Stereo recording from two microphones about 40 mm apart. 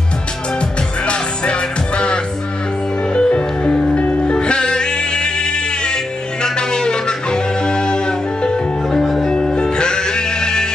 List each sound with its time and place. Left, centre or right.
0.6 s music: left
9.0 s music: centre
9.3 s music: centre